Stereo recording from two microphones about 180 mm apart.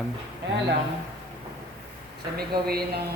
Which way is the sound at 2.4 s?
60° right (ahead or behind).